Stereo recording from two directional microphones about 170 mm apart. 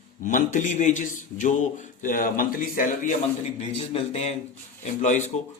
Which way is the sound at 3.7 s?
35° left (ahead or behind).